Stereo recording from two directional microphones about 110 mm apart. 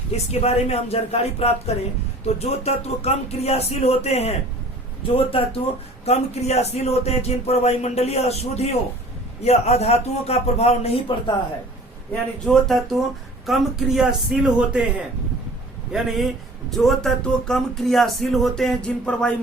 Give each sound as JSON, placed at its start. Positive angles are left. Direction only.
{"t": 0.3, "sound": "speech", "side_deg": 70}
{"t": 5.1, "sound": "speech", "side_deg": 60}
{"t": 6.1, "sound": "speech", "side_deg": 75}
{"t": 12.5, "sound": "speech", "side_deg": 0}
{"t": 15.9, "sound": "speech", "side_deg": 0}